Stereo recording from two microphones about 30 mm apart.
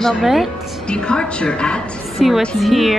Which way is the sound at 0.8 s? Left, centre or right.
Left.